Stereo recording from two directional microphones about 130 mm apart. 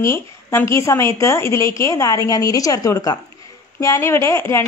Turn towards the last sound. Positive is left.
turn(degrees=20)  # may be behind; listen again after turning